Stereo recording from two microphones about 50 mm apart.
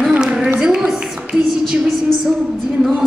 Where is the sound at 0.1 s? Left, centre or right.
Centre.